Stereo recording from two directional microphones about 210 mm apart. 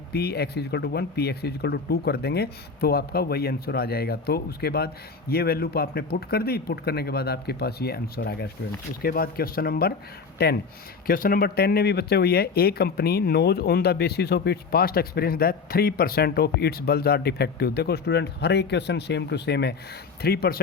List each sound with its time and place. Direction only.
0.1 s speech: 50° left (ahead or behind)